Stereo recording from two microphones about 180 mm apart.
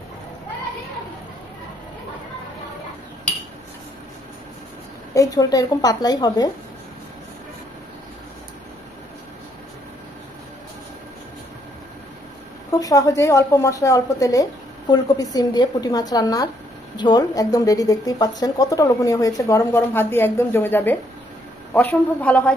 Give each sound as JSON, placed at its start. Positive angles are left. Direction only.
{"t": 5.1, "sound": "speech", "side_deg": 20}
{"t": 12.8, "sound": "a woman's voice", "side_deg": 20}